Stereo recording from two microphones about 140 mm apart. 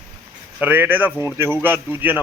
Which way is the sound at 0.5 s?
10° right (ahead or behind).